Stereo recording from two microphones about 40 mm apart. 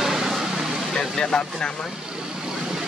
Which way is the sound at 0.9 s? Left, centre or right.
Centre.